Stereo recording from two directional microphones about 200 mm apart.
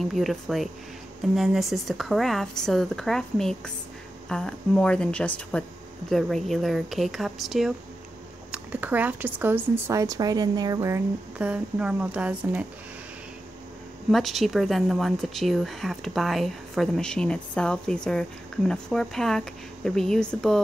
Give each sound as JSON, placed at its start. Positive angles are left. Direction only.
{"t": 0.0, "sound": "speech", "side_deg": 0}
{"t": 14.1, "sound": "speech", "side_deg": 0}